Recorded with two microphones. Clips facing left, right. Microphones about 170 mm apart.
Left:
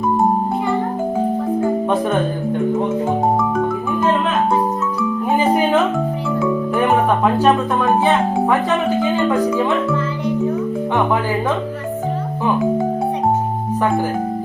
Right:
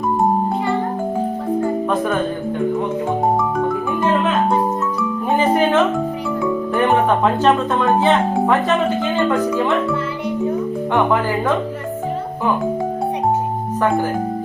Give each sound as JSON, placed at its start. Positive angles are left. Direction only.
{"t": 5.4, "sound": "music", "side_deg": 10}
{"t": 7.9, "sound": "speech", "side_deg": 10}
{"t": 10.9, "sound": "speech", "side_deg": 15}